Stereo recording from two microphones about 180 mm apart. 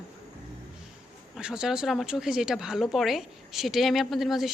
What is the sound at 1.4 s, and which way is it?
A woman's voice, 5° right (ahead or behind).